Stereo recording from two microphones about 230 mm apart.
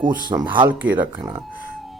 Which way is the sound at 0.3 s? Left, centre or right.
Centre.